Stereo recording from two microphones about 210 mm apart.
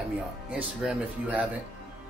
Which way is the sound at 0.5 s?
5° right (ahead or behind).